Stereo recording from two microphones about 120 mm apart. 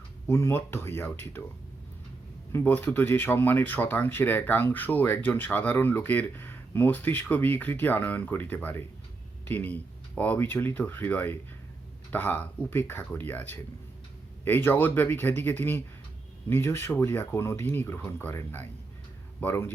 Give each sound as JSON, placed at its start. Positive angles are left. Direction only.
{"t": 0.3, "sound": "speech", "side_deg": 20}
{"t": 2.5, "sound": "speech", "side_deg": 15}